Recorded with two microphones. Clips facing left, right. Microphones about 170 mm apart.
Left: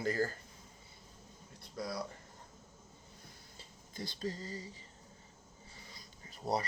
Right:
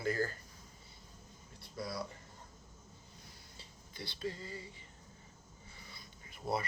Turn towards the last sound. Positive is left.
turn(degrees=35)  # may be behind; listen again after turning